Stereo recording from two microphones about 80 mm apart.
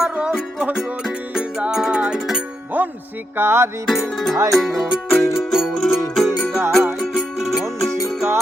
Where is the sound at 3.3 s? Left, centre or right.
Right.